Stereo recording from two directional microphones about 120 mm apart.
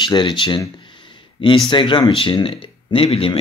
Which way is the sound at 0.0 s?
40° left (ahead or behind).